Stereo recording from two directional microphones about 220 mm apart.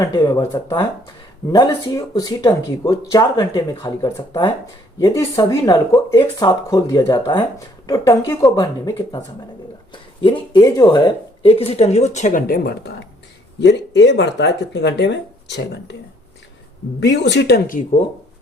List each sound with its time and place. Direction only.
0.0 s speech: 15° left (ahead or behind); by 16.0 s 50° left (ahead or behind)
17.0 s speech: 50° left (ahead or behind)